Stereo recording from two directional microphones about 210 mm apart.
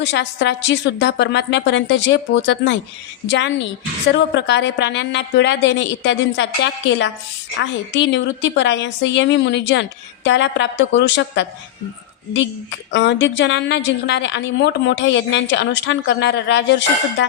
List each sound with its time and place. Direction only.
0.0 s a woman's voice: 55° left (ahead or behind)
12.9 s a woman's voice: 60° left (ahead or behind)